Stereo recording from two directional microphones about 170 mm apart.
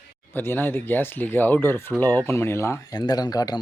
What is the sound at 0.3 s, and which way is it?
Speech, 10° left (ahead or behind).